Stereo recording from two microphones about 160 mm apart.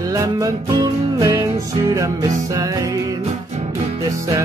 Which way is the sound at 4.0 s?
20° right (ahead or behind).